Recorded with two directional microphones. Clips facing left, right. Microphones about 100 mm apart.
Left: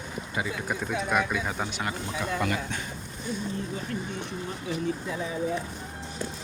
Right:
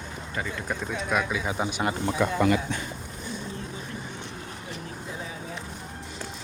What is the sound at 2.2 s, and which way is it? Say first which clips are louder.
Speech: right 6 dB; 90° right.